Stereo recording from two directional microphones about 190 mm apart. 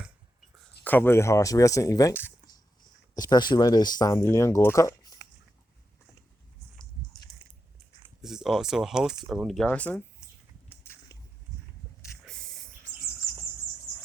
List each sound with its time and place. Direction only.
0.9 s speech: 10° left (ahead or behind)
8.2 s speech: centre (ahead or behind)